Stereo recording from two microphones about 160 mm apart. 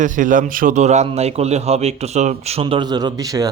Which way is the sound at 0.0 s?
55° right (ahead or behind).